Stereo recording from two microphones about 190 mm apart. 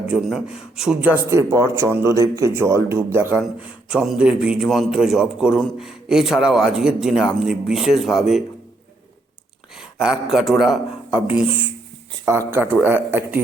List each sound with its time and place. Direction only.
0.1 s a man's voice: 5° right (ahead or behind)
9.7 s a man's voice: 5° right (ahead or behind)